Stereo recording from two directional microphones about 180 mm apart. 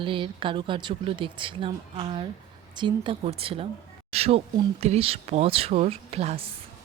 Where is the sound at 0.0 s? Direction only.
30° right (ahead or behind).